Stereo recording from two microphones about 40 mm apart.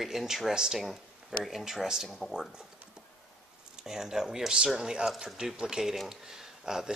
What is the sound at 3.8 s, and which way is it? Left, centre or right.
Speech, centre.